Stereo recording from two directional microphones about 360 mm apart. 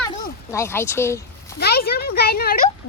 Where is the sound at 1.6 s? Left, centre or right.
Left.